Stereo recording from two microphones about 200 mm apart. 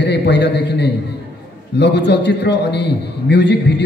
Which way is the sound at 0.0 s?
60° left (ahead or behind).